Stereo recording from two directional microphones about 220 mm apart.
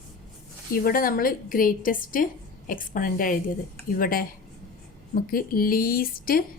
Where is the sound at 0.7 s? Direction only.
40° left (ahead or behind).